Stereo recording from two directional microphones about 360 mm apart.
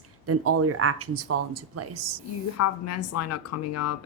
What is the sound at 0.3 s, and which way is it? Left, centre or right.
A woman's voice, right.